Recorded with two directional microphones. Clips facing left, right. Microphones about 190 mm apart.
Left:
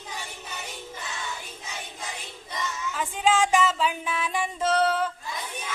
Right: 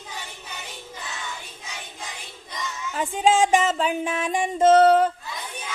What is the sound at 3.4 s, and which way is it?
Music, 45° right (ahead or behind).